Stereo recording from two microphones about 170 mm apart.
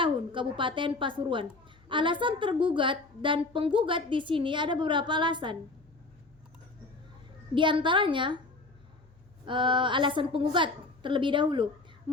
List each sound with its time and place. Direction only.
0.0 s a woman's voice: 30° right (ahead or behind)
7.5 s a woman's voice: 30° right (ahead or behind)
9.5 s a woman's voice: 30° right (ahead or behind)